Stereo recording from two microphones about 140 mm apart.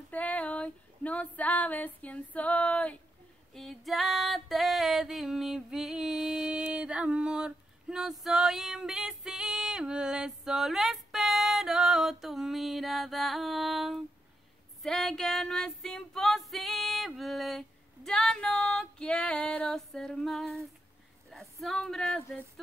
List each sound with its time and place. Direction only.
0.1 s female singing: 10° left (ahead or behind)